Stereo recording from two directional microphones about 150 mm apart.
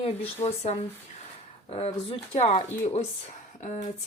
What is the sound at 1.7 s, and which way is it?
Speech, 45° left (ahead or behind).